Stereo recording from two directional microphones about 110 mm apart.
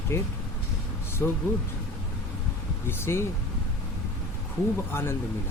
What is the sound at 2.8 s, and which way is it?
Speech, 20° left (ahead or behind).